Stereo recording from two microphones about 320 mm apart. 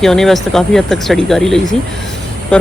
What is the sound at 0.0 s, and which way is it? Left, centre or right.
Speech, centre.